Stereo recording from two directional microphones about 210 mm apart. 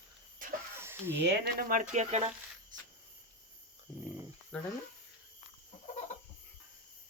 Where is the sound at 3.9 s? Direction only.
5° right (ahead or behind).